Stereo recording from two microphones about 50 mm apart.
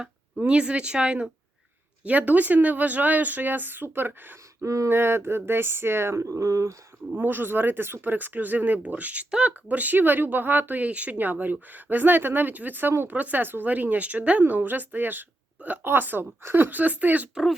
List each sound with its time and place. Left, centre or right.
0.0 s speech: right
2.0 s speech: right
4.6 s speech: right
4.9 s speech: right
7.2 s speech: right